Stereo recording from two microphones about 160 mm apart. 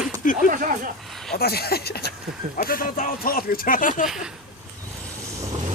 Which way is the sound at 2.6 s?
65° left (ahead or behind).